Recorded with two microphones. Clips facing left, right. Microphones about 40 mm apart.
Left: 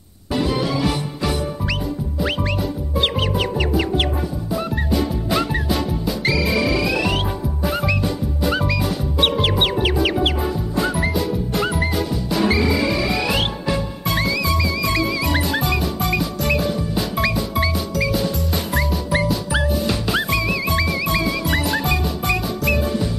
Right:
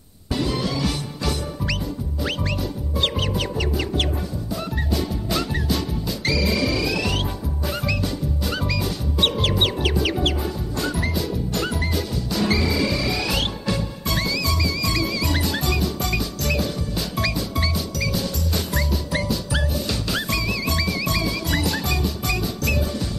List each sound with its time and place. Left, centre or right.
0.3 s music: centre
3.0 s music: centre